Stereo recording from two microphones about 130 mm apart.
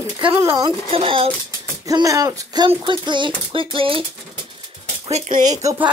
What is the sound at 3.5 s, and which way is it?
Speech, 45° right (ahead or behind).